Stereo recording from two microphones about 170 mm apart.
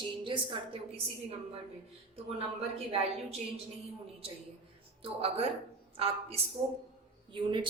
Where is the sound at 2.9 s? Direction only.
35° right (ahead or behind).